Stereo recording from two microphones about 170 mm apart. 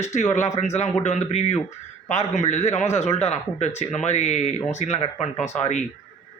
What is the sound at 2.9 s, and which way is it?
A man's voice, 40° left (ahead or behind).